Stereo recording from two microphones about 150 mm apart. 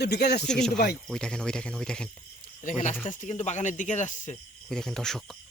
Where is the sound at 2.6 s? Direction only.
55° left (ahead or behind).